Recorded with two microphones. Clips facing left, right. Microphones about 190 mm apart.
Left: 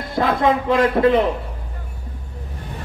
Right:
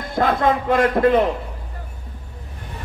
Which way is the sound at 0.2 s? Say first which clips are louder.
Left 1 dB; 50° right (ahead or behind).